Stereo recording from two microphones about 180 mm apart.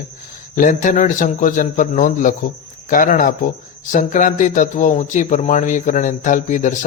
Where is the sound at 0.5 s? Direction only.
45° left (ahead or behind).